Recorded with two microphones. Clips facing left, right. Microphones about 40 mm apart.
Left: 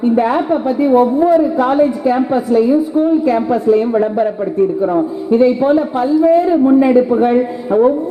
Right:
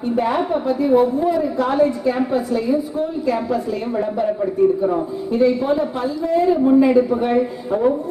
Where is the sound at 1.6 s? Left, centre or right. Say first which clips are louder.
Left 5 dB; left.